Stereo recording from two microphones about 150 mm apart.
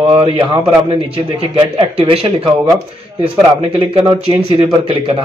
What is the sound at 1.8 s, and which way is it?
Speech, 35° right (ahead or behind).